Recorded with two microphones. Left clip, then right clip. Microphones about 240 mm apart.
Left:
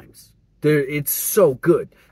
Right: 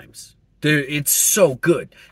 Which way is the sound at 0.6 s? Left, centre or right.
Centre.